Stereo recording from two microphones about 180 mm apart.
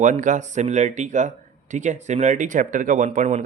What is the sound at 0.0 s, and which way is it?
Speech, 45° right (ahead or behind).